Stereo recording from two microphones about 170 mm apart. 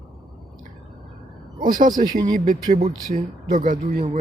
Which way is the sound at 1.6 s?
55° right (ahead or behind).